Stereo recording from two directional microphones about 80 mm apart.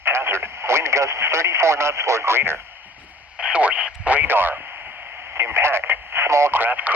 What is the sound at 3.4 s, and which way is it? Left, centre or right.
Speech, centre.